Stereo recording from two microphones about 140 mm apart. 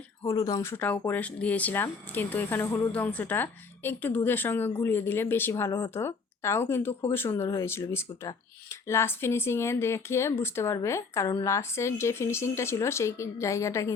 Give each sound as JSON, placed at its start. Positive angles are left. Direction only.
{"t": 0.2, "sound": "speech", "side_deg": 25}
{"t": 0.7, "sound": "speech", "side_deg": 10}